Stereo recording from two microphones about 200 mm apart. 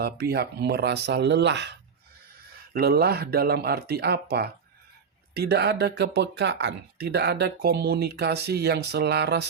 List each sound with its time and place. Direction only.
0.0 s speech: 50° right (ahead or behind)
2.7 s speech: 50° right (ahead or behind)